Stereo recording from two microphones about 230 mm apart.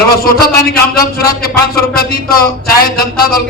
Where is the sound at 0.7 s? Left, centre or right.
Left.